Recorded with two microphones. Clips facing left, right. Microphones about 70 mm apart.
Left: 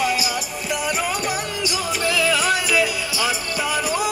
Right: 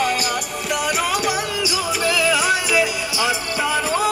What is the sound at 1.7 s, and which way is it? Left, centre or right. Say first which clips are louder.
Music: even; centre.